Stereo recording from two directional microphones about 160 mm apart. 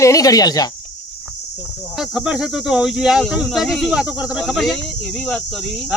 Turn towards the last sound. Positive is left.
turn(degrees=0)  # may be behind; listen again after turning